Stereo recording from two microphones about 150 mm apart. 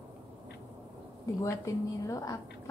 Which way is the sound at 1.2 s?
20° left (ahead or behind).